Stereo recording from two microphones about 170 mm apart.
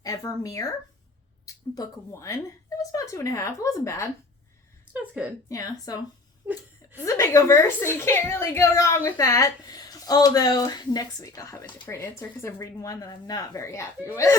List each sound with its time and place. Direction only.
0.0 s a woman's voice: 20° left (ahead or behind)
4.9 s a woman's voice: 10° right (ahead or behind)
5.5 s a woman's voice: 20° left (ahead or behind)
6.4 s speech: centre (ahead or behind)
7.0 s a woman's voice: 20° left (ahead or behind)